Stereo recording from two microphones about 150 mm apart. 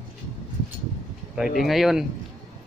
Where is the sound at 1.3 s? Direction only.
Centre (ahead or behind).